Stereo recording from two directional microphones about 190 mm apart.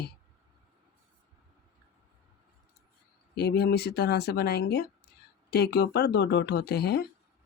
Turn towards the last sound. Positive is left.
turn(degrees=55)  # may be behind; listen again after turning